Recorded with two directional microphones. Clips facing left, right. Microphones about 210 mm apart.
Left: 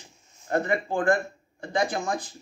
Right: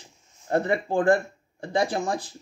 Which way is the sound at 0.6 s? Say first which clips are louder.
Right 3 dB; 30° right (ahead or behind).